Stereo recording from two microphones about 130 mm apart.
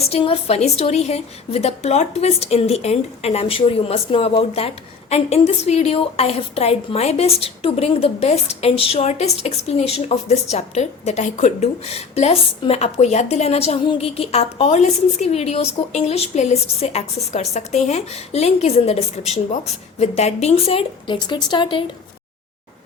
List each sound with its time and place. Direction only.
0.0 s a woman's voice: 50° left (ahead or behind)